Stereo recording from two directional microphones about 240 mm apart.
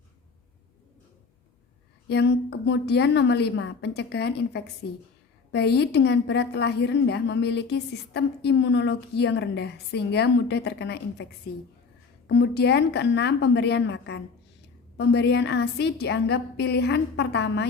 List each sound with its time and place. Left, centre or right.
2.0 s a woman's voice: left
12.3 s a woman's voice: left